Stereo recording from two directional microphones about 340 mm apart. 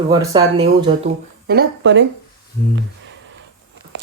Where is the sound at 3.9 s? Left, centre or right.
Right.